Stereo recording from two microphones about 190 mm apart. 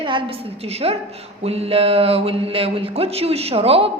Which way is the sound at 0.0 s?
30° right (ahead or behind).